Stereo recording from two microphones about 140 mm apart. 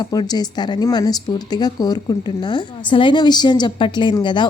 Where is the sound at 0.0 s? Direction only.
30° left (ahead or behind).